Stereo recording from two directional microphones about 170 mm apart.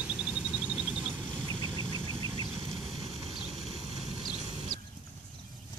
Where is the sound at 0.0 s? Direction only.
5° right (ahead or behind).